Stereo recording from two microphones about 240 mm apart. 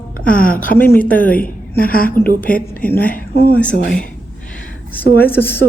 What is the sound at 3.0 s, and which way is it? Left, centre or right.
Speech, left.